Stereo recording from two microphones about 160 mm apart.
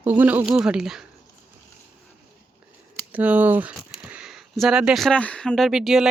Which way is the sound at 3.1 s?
10° right (ahead or behind).